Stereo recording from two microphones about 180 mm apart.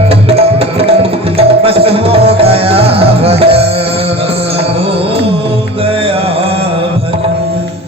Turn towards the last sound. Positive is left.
turn(degrees=-30)  # may be behind; listen again after turning